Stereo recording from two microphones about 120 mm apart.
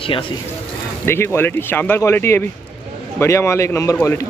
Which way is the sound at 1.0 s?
20° left (ahead or behind).